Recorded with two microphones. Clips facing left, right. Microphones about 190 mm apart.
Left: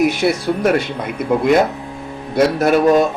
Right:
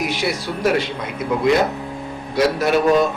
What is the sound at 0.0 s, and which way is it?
A man's voice, 50° left (ahead or behind).